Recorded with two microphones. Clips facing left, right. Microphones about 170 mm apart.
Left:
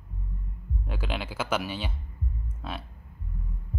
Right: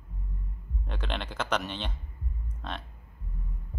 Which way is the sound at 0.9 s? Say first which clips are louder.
Left 2 dB; 5° left (ahead or behind).